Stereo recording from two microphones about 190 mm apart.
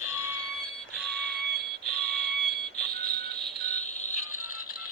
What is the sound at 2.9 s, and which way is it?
Music, 55° right (ahead or behind).